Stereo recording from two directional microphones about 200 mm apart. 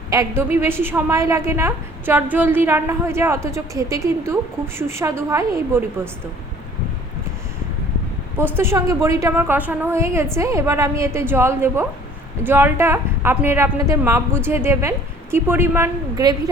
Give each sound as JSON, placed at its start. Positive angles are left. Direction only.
{"t": 0.1, "sound": "a woman's voice", "side_deg": -15}
{"t": 8.4, "sound": "a woman's voice", "side_deg": -10}